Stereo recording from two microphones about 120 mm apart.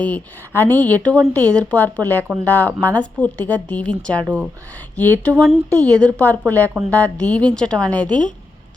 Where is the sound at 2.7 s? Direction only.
20° right (ahead or behind).